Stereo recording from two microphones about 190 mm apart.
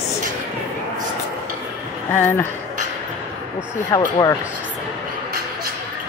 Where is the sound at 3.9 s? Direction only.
20° left (ahead or behind).